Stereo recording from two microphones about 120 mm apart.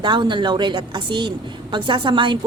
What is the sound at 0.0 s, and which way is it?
A woman's voice, 40° right (ahead or behind).